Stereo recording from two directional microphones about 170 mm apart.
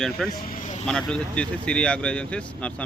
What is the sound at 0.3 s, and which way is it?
Vehicle, 55° left (ahead or behind).